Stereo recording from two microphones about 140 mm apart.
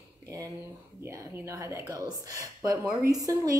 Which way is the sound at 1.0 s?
20° right (ahead or behind).